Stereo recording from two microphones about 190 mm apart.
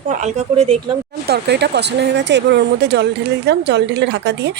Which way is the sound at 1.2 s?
60° right (ahead or behind).